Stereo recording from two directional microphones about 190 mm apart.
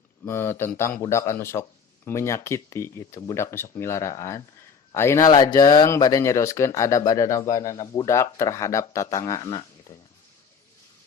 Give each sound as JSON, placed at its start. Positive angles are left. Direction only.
{"t": 0.3, "sound": "speech", "side_deg": 10}